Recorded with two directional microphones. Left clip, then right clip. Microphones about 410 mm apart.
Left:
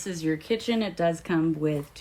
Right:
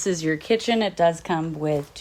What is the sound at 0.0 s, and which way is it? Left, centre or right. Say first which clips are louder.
Speech: right 5 dB; centre.